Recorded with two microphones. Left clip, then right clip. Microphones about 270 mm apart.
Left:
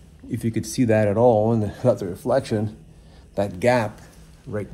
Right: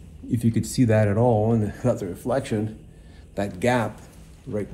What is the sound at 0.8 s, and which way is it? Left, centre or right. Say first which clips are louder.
Speech: left 4 dB; left.